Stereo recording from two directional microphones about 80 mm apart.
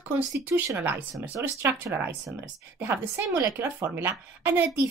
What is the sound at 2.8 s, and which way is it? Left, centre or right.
Speech, right.